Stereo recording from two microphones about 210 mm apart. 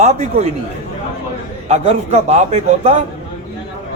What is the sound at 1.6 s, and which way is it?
A man's voice, 30° right (ahead or behind).